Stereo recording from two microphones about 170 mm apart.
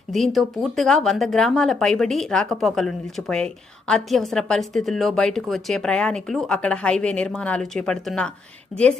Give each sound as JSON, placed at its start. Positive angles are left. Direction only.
{"t": 0.1, "sound": "speech", "side_deg": 0}